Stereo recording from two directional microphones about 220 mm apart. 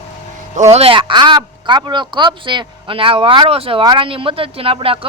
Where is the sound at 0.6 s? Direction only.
30° right (ahead or behind).